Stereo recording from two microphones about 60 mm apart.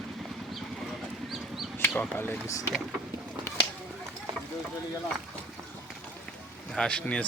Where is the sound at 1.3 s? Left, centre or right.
Centre.